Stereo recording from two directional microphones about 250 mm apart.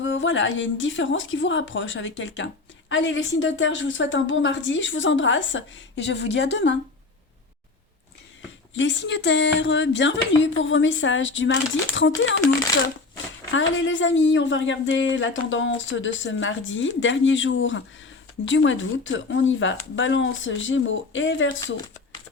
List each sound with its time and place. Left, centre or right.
0.0 s a woman's voice: left
8.7 s a woman's voice: left
13.5 s a woman's voice: left